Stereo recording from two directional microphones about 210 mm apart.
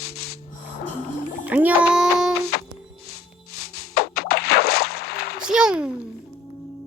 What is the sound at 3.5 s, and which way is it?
Music, 90° left.